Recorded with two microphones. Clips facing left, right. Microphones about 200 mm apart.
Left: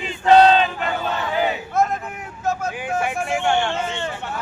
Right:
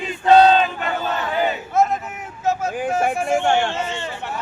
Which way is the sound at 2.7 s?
40° right (ahead or behind).